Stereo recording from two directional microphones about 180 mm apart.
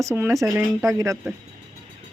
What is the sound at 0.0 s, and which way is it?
Speech, 15° right (ahead or behind).